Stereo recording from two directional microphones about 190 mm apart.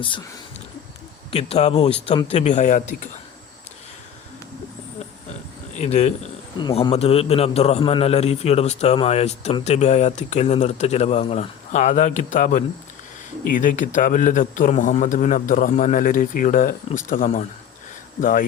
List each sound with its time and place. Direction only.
1.3 s a man's voice: 30° left (ahead or behind)
5.7 s speech: 35° left (ahead or behind)
6.6 s a man's voice: 25° left (ahead or behind); by 18.4 s 45° left (ahead or behind)